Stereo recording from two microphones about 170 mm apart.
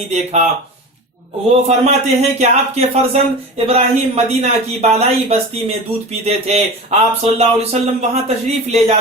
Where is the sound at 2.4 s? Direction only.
40° right (ahead or behind).